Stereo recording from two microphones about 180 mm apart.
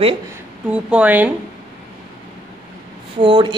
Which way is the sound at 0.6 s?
5° right (ahead or behind).